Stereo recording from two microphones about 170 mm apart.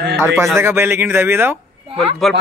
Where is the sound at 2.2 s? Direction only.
Centre (ahead or behind).